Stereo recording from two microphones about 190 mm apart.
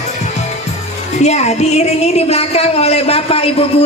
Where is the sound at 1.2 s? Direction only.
35° left (ahead or behind).